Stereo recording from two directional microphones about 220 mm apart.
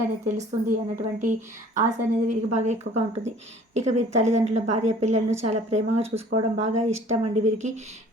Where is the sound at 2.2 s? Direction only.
35° right (ahead or behind).